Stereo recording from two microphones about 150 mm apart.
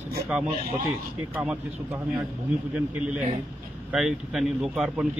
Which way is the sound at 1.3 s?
5° right (ahead or behind).